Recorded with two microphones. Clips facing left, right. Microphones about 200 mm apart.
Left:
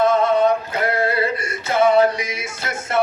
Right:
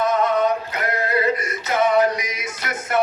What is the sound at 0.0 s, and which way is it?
Music, 30° left (ahead or behind).